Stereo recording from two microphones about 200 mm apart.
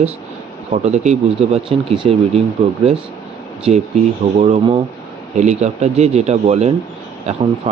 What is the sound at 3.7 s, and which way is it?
Speech, 30° right (ahead or behind).